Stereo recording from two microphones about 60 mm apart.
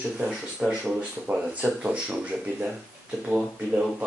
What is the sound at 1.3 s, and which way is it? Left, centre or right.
Speech, right.